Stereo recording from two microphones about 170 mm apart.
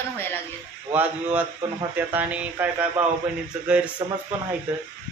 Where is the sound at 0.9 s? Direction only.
10° right (ahead or behind).